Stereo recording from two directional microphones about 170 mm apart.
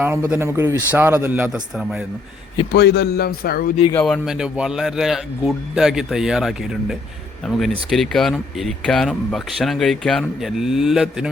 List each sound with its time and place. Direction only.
0.0 s a man's voice: 10° right (ahead or behind)
2.7 s a man's voice: 75° left (ahead or behind)
3.9 s speech: centre (ahead or behind)